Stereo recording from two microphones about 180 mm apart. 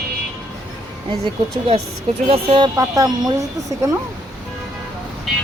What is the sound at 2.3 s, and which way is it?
A woman's voice, 30° right (ahead or behind).